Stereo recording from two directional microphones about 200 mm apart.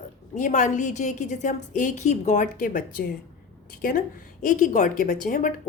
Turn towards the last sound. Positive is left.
turn(degrees=40)  # may be behind; listen again after turning